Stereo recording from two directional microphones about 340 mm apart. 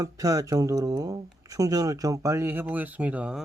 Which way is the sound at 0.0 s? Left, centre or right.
Centre.